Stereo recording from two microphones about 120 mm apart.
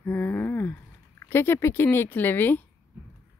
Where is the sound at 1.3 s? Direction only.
20° left (ahead or behind).